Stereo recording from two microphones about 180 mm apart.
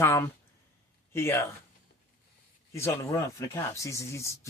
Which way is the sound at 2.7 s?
15° left (ahead or behind).